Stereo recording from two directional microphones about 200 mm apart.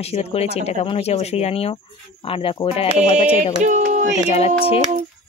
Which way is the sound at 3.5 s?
35° right (ahead or behind).